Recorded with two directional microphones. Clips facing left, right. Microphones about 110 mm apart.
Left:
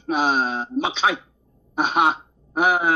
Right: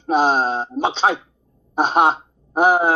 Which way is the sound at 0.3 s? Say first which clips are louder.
Right 3 dB; 45° right (ahead or behind).